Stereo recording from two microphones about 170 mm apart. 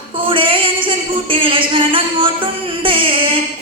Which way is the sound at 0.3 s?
30° right (ahead or behind).